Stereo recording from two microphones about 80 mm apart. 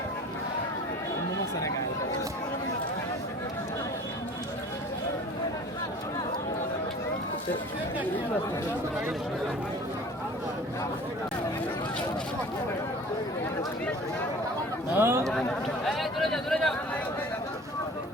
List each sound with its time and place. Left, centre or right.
14.9 s speech: right
15.3 s a man's voice: centre